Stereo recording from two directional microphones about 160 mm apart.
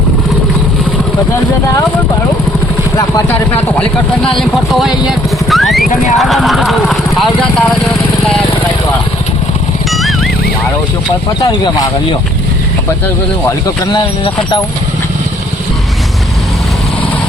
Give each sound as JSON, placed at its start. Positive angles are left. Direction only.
{"t": 3.0, "sound": "speech", "side_deg": 15}
{"t": 4.4, "sound": "speech", "side_deg": 0}
{"t": 9.9, "sound": "music", "side_deg": 0}
{"t": 11.3, "sound": "speech", "side_deg": 30}
{"t": 13.9, "sound": "speech", "side_deg": 30}